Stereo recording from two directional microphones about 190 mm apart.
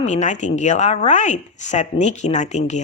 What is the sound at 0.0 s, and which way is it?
Speech, 35° left (ahead or behind).